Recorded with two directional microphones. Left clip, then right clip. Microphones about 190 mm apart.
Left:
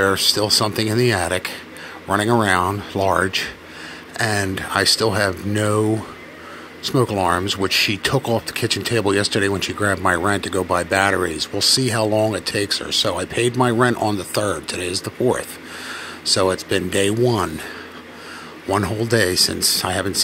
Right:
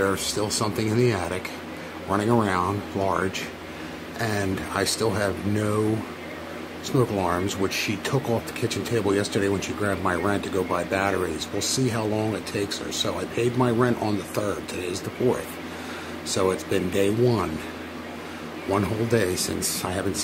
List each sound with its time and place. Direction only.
0.0 s speech: 25° left (ahead or behind)
6.8 s speech: 25° left (ahead or behind)
18.7 s speech: 30° left (ahead or behind)